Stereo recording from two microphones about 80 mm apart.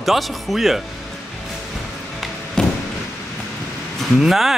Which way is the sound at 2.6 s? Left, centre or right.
Centre.